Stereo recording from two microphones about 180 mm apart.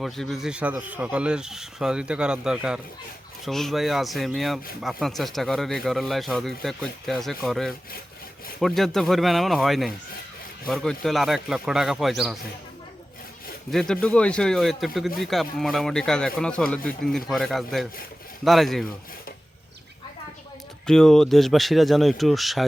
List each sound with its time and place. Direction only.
0.0 s speech: centre (ahead or behind)
13.7 s speech: 5° left (ahead or behind)
20.8 s speech: 5° left (ahead or behind)